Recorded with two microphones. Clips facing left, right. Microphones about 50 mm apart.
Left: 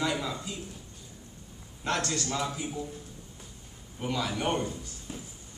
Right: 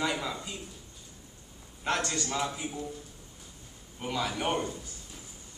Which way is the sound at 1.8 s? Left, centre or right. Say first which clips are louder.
Even; centre.